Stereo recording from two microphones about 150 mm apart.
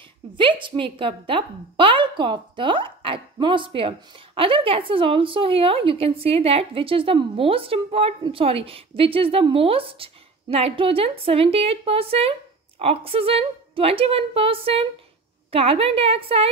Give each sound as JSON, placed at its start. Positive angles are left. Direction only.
{"t": 0.4, "sound": "a woman's voice", "side_deg": -35}